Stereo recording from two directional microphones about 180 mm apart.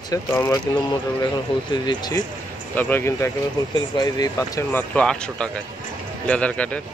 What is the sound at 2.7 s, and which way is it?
Speech, 10° left (ahead or behind).